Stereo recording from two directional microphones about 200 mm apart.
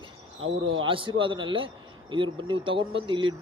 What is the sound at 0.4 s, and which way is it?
Speech, 80° right.